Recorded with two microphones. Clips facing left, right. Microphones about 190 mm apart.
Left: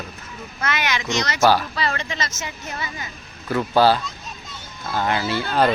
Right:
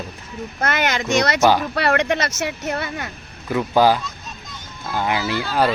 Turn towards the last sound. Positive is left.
turn(degrees=-10)  # may be behind; listen again after turning